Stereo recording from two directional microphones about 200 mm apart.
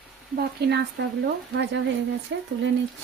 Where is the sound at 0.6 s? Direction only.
55° right (ahead or behind).